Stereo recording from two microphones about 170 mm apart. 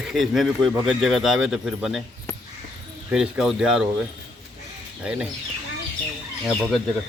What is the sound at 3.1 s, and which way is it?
Speech, 10° right (ahead or behind).